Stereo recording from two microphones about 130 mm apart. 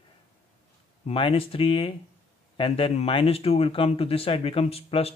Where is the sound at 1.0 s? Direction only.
45° left (ahead or behind).